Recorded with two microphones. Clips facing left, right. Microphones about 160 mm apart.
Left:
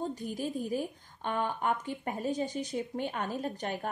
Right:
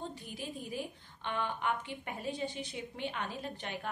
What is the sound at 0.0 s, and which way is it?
A woman's voice, 40° left (ahead or behind).